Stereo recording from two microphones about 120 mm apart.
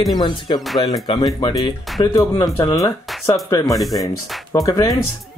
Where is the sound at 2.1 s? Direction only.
25° left (ahead or behind).